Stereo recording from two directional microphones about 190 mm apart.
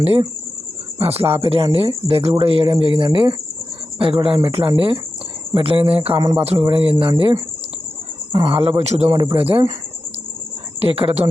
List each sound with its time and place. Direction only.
0.0 s speech: 30° right (ahead or behind)
9.0 s speech: 20° right (ahead or behind)
10.8 s speech: 30° right (ahead or behind)